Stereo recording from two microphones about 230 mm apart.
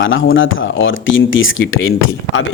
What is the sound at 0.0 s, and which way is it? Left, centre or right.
Speech, left.